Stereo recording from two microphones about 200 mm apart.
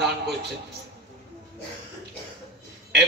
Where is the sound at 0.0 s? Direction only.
55° right (ahead or behind).